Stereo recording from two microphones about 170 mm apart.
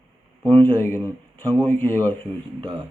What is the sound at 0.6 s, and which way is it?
Speech, 10° left (ahead or behind).